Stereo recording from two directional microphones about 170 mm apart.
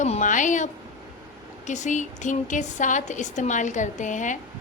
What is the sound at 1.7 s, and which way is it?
A woman's voice, 45° left (ahead or behind).